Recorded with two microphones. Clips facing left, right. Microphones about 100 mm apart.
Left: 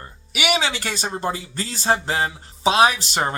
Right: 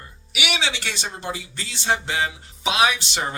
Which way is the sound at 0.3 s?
40° left (ahead or behind).